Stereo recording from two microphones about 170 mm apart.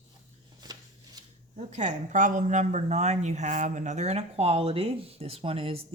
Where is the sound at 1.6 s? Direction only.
45° right (ahead or behind).